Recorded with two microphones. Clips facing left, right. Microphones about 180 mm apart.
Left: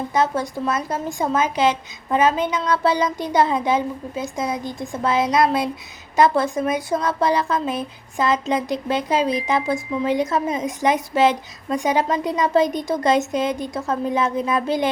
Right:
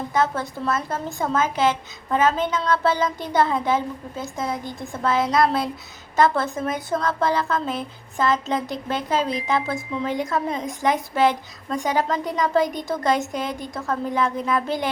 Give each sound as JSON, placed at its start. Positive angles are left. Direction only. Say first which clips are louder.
{"t": 0.1, "sound": "a woman's voice", "louder": "left 1 dB", "side_deg": 20}